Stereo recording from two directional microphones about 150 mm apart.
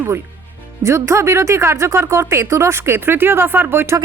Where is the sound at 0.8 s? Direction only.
20° right (ahead or behind).